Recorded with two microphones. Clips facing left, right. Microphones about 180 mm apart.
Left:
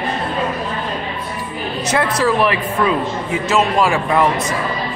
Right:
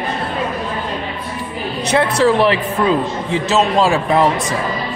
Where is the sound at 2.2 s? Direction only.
25° right (ahead or behind).